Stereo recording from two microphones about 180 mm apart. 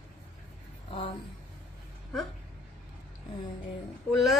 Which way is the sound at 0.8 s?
30° left (ahead or behind).